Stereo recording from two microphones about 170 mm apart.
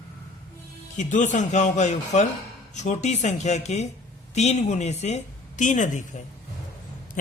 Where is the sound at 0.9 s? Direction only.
45° left (ahead or behind).